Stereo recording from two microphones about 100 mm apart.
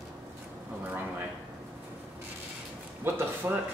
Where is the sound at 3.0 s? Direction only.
20° right (ahead or behind).